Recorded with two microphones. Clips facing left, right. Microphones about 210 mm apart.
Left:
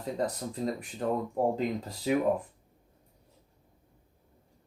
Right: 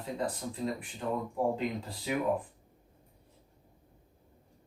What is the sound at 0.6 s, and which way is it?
Speech, 45° left (ahead or behind).